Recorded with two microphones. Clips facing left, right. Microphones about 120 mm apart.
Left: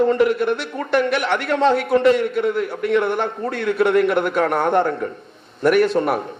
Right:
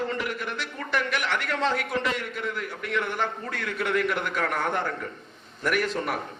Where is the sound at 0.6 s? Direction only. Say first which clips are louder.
Left 9 dB; 40° left (ahead or behind).